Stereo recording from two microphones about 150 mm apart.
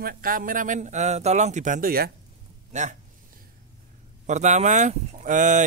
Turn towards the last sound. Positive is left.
turn(degrees=-55)  # may be behind; listen again after turning